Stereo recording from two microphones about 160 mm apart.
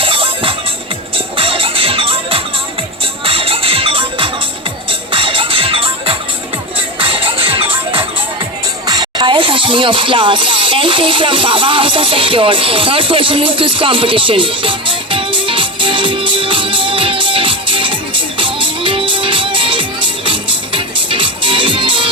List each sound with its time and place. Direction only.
0.0 s music: 35° right (ahead or behind)